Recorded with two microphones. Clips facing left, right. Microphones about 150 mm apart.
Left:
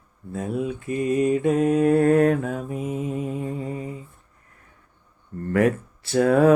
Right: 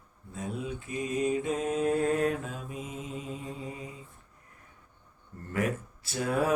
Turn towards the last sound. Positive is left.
turn(degrees=60)  # may be behind; listen again after turning